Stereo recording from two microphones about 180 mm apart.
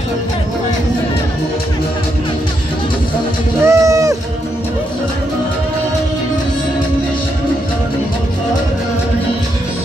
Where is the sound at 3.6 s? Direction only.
15° right (ahead or behind).